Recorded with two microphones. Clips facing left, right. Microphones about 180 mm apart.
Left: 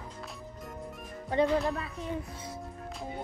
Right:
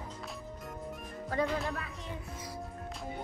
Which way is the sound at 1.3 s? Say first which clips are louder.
Left 5 dB; 20° left (ahead or behind).